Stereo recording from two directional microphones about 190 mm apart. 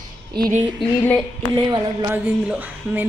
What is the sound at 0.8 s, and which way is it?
Speech, 5° left (ahead or behind).